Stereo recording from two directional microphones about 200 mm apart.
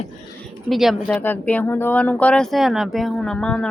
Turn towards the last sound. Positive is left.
turn(degrees=5)  # may be behind; listen again after turning